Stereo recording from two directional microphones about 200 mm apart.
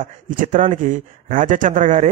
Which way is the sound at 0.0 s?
40° right (ahead or behind).